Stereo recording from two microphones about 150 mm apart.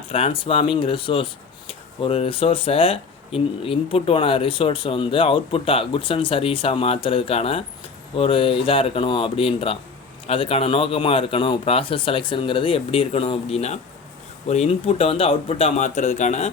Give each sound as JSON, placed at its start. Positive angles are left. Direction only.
{"t": 0.1, "sound": "a man's voice", "side_deg": 40}